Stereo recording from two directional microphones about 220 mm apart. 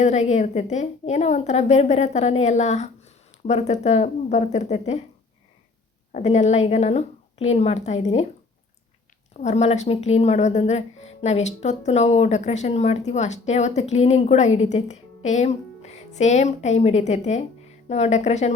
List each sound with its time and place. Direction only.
0.0 s speech: 30° left (ahead or behind)
6.1 s a woman's voice: 30° left (ahead or behind)
9.3 s speech: 30° left (ahead or behind)